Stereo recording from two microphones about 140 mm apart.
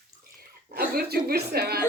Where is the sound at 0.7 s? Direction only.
90° right.